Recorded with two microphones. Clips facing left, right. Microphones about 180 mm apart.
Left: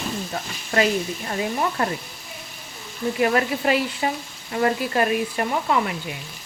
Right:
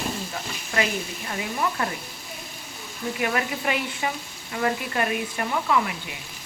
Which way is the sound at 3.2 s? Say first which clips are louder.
Left 6 dB; 35° left (ahead or behind).